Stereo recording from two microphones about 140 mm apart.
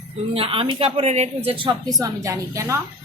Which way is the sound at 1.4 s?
35° right (ahead or behind).